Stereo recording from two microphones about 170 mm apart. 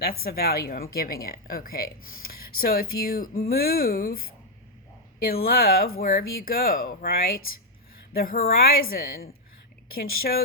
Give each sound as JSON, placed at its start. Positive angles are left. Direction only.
{"t": 0.0, "sound": "a woman's voice", "side_deg": 60}
{"t": 5.2, "sound": "a woman's voice", "side_deg": 60}